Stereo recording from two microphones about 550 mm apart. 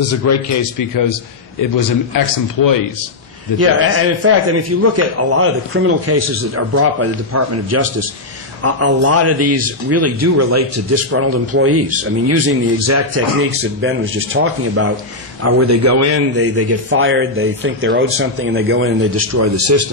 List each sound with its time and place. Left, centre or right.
0.1 s a man's voice: left
3.5 s a man's voice: right